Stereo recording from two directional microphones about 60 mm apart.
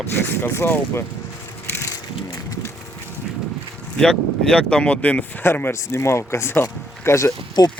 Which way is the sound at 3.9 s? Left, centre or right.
Centre.